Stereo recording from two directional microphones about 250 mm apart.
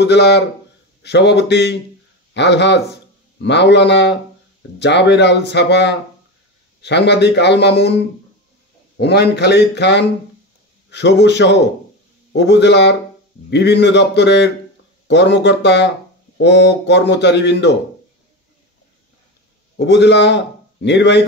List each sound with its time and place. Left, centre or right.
0.0 s a man's voice: left
8.9 s a man's voice: left
19.8 s speech: left